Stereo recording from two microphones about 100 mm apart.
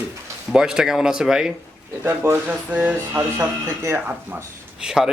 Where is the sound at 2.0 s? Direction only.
20° right (ahead or behind).